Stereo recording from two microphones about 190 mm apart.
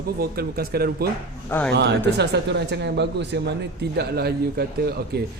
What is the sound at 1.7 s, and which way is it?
A man's voice, 65° right (ahead or behind).